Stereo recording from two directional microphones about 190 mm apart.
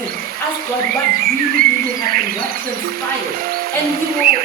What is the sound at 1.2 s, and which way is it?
Speech, 50° right (ahead or behind).